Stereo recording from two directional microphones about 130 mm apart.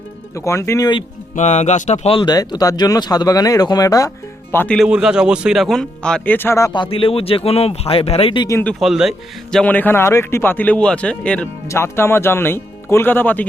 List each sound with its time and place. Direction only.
0.3 s speech: 20° left (ahead or behind)
1.4 s speech: 65° left (ahead or behind)
2.1 s speech: 30° left (ahead or behind)
4.5 s speech: 10° left (ahead or behind)
4.8 s speech: 5° right (ahead or behind); by 6.7 s 20° left (ahead or behind)
6.7 s speech: 40° left (ahead or behind)
8.8 s speech: centre (ahead or behind)
11.7 s speech: 20° left (ahead or behind)